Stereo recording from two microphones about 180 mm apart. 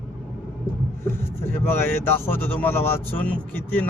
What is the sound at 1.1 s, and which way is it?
Speech, 15° left (ahead or behind).